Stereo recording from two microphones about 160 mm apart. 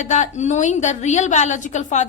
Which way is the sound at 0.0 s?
50° left (ahead or behind).